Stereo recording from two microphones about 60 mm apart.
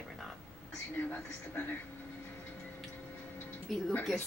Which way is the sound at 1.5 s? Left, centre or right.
Left.